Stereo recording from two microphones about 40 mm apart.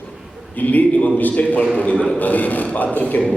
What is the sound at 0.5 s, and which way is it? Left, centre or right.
A man's voice, left.